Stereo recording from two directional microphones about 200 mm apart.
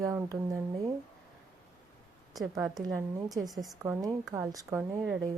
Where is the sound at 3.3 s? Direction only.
20° right (ahead or behind).